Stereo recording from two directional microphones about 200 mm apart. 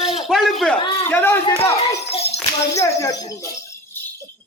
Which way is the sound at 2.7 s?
15° left (ahead or behind).